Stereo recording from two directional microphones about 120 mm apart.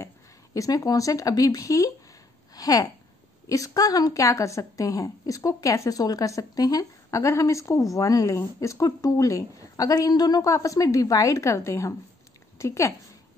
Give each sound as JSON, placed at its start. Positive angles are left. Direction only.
{"t": 0.6, "sound": "a woman's voice", "side_deg": 30}
{"t": 2.5, "sound": "a sound", "side_deg": 30}
{"t": 3.4, "sound": "a woman's voice", "side_deg": 30}